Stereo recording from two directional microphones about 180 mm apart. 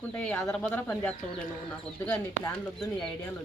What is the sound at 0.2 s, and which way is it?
Speech, 5° left (ahead or behind).